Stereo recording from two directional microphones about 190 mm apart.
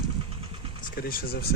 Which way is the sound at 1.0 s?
50° left (ahead or behind).